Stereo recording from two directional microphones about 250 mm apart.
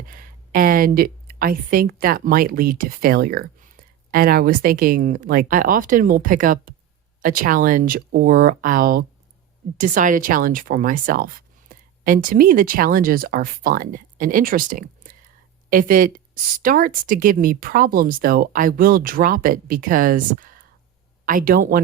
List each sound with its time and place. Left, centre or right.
0.0 s a woman's voice: right